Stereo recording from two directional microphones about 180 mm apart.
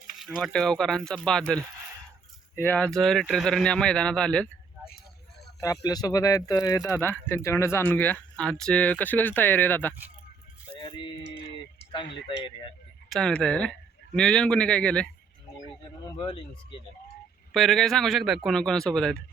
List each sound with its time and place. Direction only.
0.2 s a man's voice: centre (ahead or behind)
2.6 s a man's voice: 10° left (ahead or behind)
5.5 s speech: 20° left (ahead or behind)
10.8 s music: 25° left (ahead or behind)
11.8 s a sound: 70° left (ahead or behind)
12.3 s speech: 30° left (ahead or behind)
13.1 s a man's voice: 5° left (ahead or behind)
15.6 s a sound: 25° left (ahead or behind)
17.5 s a man's voice: centre (ahead or behind)